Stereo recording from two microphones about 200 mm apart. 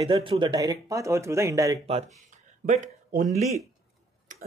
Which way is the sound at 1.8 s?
30° right (ahead or behind).